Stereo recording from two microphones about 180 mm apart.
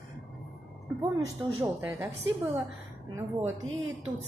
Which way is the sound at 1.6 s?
5° right (ahead or behind).